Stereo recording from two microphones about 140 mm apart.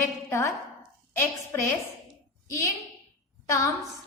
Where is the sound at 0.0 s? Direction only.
20° left (ahead or behind).